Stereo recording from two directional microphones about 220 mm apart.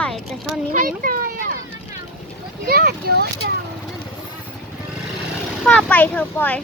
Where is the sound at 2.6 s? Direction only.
45° right (ahead or behind).